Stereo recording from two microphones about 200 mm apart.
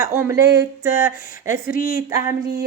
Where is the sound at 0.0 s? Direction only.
15° right (ahead or behind).